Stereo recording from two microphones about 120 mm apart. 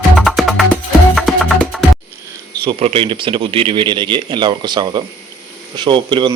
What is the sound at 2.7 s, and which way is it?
Speech, 55° right (ahead or behind).